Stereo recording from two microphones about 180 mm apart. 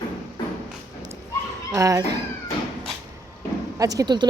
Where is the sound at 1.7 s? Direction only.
20° right (ahead or behind).